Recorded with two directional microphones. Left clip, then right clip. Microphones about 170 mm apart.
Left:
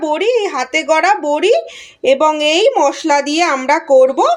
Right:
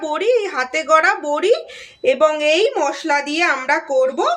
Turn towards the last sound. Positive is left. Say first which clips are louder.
# left 7 dB
turn(degrees=30)  # may be behind; listen again after turning